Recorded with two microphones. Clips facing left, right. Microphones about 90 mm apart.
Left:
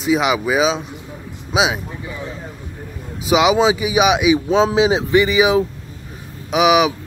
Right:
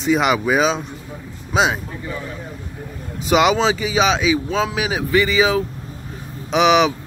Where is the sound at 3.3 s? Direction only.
5° left (ahead or behind).